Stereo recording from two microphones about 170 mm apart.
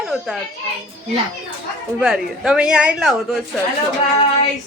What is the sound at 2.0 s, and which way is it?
Speech, 5° right (ahead or behind).